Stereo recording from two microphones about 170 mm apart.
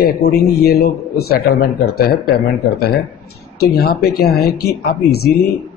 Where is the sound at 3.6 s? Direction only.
65° left (ahead or behind).